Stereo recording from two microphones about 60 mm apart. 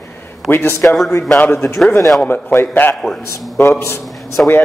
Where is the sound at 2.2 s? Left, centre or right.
Left.